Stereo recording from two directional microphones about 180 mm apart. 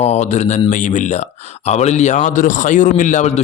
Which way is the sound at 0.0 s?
35° left (ahead or behind).